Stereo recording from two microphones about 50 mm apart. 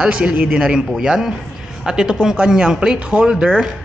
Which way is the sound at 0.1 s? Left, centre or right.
Right.